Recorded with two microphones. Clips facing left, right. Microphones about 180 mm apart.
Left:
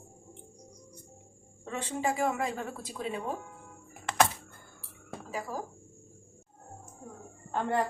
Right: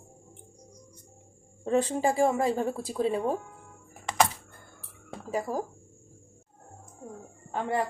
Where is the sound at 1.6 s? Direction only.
35° right (ahead or behind).